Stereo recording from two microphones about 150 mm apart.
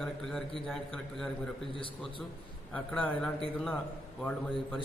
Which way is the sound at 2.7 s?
10° left (ahead or behind).